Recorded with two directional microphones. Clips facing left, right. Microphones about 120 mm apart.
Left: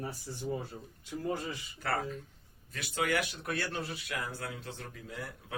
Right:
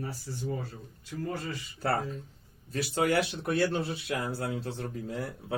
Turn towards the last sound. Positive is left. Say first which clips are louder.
# right 7 dB
turn(degrees=-35)  # may be behind; listen again after turning